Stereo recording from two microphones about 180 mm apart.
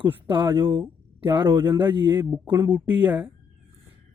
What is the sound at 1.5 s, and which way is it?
Speech, 15° right (ahead or behind).